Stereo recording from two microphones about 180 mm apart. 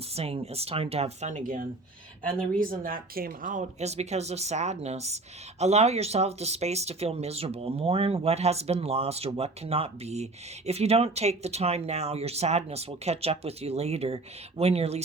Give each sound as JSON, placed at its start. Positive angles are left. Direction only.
{"t": 0.1, "sound": "speech", "side_deg": -35}